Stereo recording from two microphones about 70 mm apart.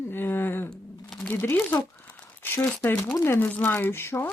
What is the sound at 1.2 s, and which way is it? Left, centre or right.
Speech, centre.